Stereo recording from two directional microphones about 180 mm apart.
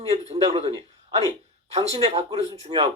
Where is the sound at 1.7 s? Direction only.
35° right (ahead or behind).